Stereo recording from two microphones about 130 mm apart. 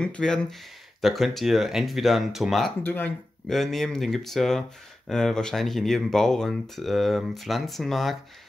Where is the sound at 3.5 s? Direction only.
Centre (ahead or behind).